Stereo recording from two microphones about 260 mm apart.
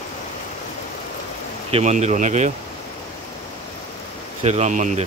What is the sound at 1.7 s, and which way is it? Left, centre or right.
Speech, right.